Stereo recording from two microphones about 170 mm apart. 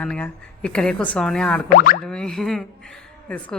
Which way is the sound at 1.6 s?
55° left (ahead or behind).